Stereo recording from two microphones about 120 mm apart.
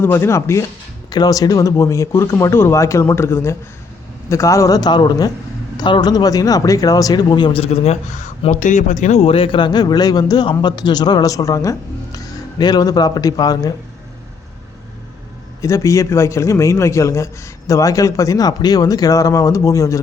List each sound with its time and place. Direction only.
0.0 s a man's voice: 20° left (ahead or behind); by 8.3 s 80° left
8.4 s a man's voice: 90° left; by 13.7 s 35° left (ahead or behind)
15.6 s a man's voice: 25° left (ahead or behind)